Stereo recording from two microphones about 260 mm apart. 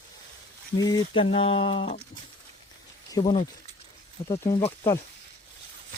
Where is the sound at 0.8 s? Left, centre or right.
Centre.